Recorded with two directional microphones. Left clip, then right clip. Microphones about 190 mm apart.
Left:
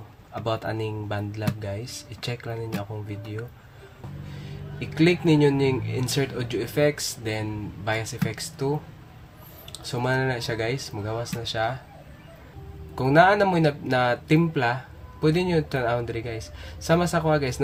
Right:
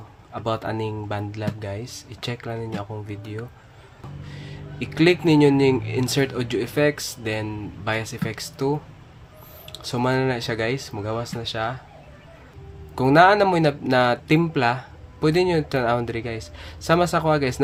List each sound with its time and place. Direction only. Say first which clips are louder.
0.3 s speech: right 2 dB; 10° right (ahead or behind)
4.4 s speech: right 4 dB; 20° right (ahead or behind)
13.0 s speech: right 3 dB; 20° right (ahead or behind)